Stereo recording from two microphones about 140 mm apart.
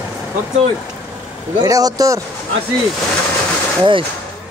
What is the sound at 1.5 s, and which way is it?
Speech, 25° right (ahead or behind).